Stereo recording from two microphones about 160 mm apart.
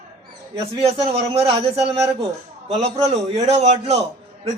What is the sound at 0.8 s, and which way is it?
Speech, 40° right (ahead or behind).